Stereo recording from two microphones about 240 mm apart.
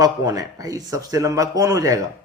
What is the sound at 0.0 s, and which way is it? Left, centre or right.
A man's voice, centre.